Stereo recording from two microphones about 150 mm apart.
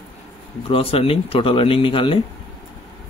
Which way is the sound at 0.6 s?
40° left (ahead or behind).